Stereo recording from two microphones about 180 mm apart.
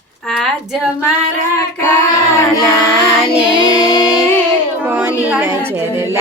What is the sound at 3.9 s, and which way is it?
Music, 20° left (ahead or behind).